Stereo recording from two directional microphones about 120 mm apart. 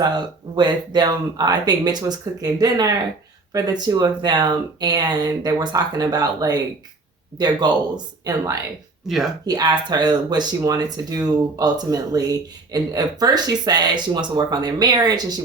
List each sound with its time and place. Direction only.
0.0 s speech: 40° right (ahead or behind)
9.0 s speech: centre (ahead or behind)
9.5 s speech: 35° right (ahead or behind)